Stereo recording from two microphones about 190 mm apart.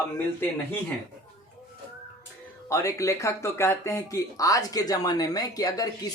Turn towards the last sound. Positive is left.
turn(degrees=20)  # may be behind; listen again after turning